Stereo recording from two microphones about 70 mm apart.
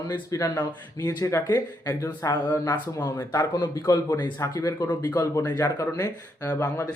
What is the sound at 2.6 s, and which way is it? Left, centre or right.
Speech, left.